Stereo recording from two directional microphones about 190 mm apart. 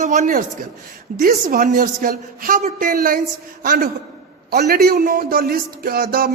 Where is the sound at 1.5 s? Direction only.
45° right (ahead or behind).